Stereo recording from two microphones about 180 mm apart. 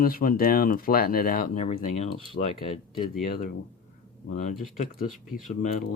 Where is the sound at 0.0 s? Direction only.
55° left (ahead or behind); by 2.2 s 35° left (ahead or behind).